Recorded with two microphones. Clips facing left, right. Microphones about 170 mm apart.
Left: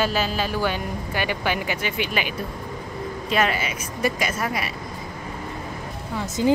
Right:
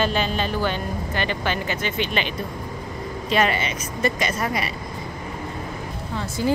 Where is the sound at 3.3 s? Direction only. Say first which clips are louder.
Right 2 dB; centre (ahead or behind).